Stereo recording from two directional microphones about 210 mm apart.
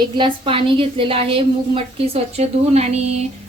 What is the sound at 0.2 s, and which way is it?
A woman's voice, 25° right (ahead or behind).